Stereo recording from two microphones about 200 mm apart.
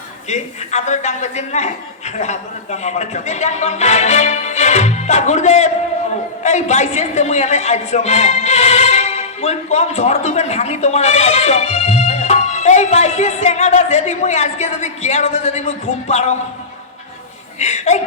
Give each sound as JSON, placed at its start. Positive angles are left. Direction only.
{"t": 0.3, "sound": "a man's voice", "side_deg": 35}
{"t": 17.6, "sound": "a man's voice", "side_deg": 35}